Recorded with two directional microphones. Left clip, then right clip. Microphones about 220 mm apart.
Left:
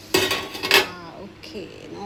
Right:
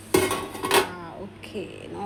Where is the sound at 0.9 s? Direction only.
5° right (ahead or behind).